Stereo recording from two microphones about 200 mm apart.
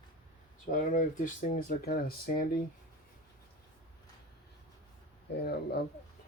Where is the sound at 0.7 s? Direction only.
40° left (ahead or behind).